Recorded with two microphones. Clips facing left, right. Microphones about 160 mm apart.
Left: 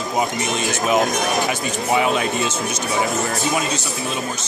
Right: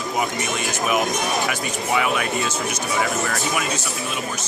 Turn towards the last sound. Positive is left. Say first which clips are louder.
# left 2 dB
turn(degrees=25)  # may be behind; listen again after turning